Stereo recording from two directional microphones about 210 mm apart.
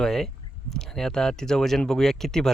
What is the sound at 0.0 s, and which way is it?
Speech, centre (ahead or behind).